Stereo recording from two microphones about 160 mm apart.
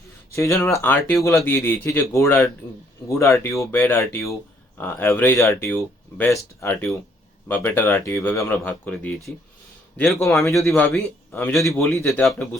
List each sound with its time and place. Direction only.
0.3 s a man's voice: 20° left (ahead or behind); by 10.3 s centre (ahead or behind)
10.7 s speech: 15° left (ahead or behind)